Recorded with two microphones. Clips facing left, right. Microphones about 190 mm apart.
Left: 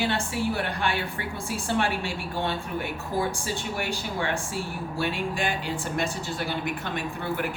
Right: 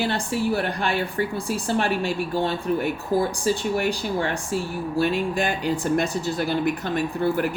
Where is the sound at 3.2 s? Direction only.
40° right (ahead or behind).